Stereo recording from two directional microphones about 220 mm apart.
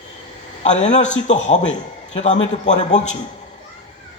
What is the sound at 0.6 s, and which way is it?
A woman's voice, 30° left (ahead or behind).